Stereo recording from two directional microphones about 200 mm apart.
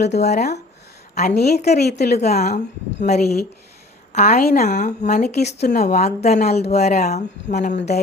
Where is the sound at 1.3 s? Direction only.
55° left (ahead or behind).